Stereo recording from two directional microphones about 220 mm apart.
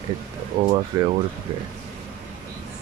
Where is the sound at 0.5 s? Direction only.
25° right (ahead or behind).